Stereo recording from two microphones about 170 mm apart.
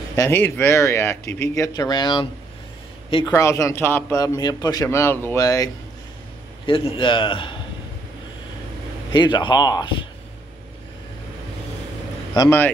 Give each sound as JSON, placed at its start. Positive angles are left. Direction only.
{"t": 0.1, "sound": "speech", "side_deg": 15}
{"t": 3.3, "sound": "a man's voice", "side_deg": 20}
{"t": 9.1, "sound": "a man's voice", "side_deg": 25}
{"t": 12.4, "sound": "speech", "side_deg": 15}